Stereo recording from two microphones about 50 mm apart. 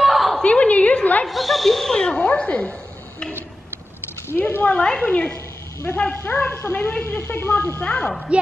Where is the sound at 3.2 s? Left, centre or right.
Centre.